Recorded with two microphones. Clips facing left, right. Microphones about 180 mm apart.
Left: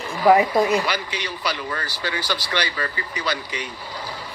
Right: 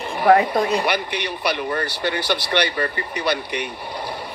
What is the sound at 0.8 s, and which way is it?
Speech, 65° right (ahead or behind).